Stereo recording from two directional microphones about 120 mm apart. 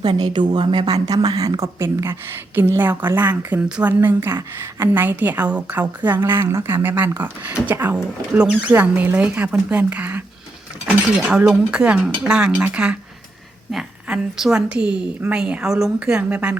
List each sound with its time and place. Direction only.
0.0 s a woman's voice: 35° right (ahead or behind); by 10.2 s 10° right (ahead or behind)
11.3 s a woman's voice: 10° right (ahead or behind)